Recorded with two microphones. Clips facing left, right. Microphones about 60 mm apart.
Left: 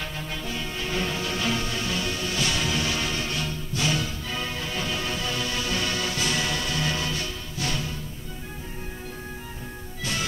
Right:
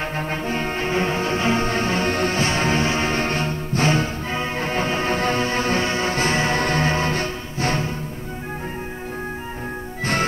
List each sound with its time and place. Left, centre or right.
0.2 s music: right